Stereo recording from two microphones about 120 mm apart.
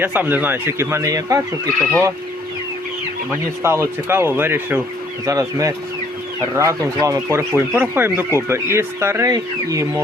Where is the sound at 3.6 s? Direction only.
20° right (ahead or behind).